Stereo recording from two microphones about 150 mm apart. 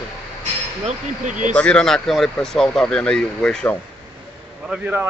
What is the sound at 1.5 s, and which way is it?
Speech, 5° left (ahead or behind).